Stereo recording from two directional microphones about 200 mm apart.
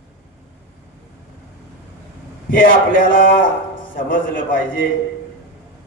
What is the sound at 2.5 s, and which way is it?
A man's voice, 45° left (ahead or behind).